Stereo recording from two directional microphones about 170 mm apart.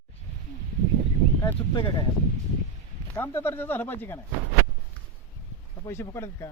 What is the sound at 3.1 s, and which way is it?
Speech, 15° left (ahead or behind).